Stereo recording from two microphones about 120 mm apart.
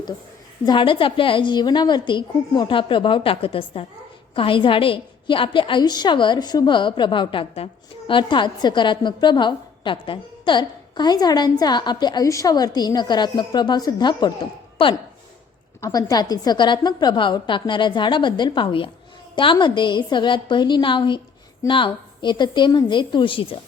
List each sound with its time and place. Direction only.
0.6 s a woman's voice: 40° left (ahead or behind)
15.8 s a woman's voice: 30° left (ahead or behind); by 23.6 s 45° left (ahead or behind)